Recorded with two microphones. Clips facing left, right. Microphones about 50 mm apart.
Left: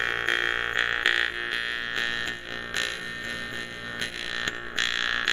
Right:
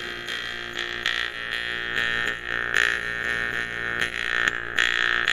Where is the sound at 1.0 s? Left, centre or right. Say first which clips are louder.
Even; centre.